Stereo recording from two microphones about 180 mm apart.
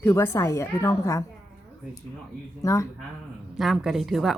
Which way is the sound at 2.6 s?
15° left (ahead or behind).